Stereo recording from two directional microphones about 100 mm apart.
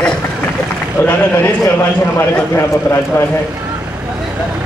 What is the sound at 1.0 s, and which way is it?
A man's voice, 20° left (ahead or behind).